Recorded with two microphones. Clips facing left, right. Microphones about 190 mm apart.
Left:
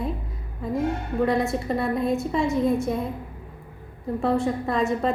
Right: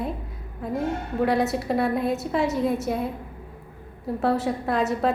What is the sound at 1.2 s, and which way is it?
A woman's voice, centre (ahead or behind).